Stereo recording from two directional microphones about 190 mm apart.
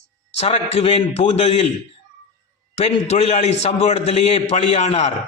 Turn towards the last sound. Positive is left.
turn(degrees=35)  # may be behind; listen again after turning